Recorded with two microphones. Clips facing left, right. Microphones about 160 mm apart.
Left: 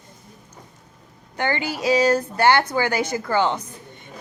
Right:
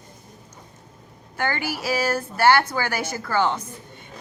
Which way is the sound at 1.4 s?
20° left (ahead or behind).